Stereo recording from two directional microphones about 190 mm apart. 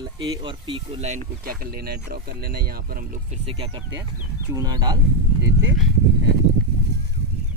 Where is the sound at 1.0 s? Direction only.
40° right (ahead or behind).